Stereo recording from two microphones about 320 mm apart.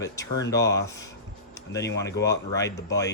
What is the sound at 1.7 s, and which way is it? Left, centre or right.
Speech, left.